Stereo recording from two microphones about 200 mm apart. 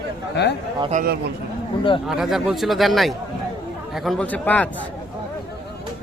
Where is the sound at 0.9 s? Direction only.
45° right (ahead or behind).